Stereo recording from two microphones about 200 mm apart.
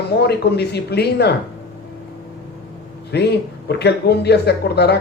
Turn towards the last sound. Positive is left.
turn(degrees=55)  # may be behind; listen again after turning